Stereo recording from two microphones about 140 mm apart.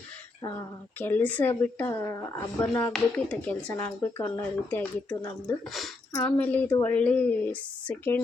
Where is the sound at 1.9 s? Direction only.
25° left (ahead or behind).